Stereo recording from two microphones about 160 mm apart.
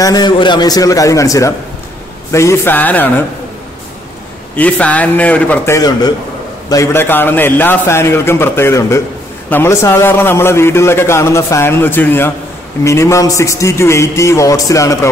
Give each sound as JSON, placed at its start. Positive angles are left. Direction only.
{"t": 0.0, "sound": "a man's voice", "side_deg": 25}
{"t": 4.6, "sound": "a man's voice", "side_deg": 10}
{"t": 5.8, "sound": "a man's voice", "side_deg": 25}